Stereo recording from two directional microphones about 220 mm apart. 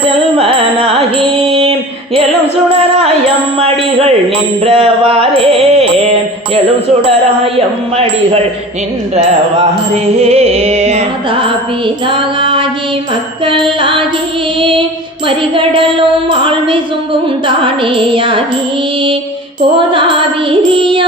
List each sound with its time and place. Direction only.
0.3 s carnatic music: 25° right (ahead or behind)
1.5 s a sound: 25° right (ahead or behind)
4.6 s music: 25° right (ahead or behind)
7.4 s music: 25° right (ahead or behind)
12.0 s female singing: 25° right (ahead or behind)
13.4 s music: 20° right (ahead or behind)
15.3 s a sound: 25° right (ahead or behind)
17.4 s music: 25° right (ahead or behind)
19.7 s music: 20° right (ahead or behind)